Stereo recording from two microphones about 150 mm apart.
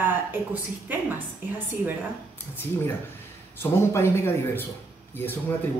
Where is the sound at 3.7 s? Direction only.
15° left (ahead or behind).